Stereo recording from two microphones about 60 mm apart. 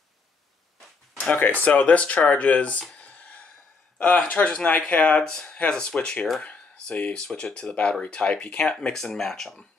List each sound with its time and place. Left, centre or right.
1.3 s speech: left
2.8 s a sound: centre
4.3 s speech: left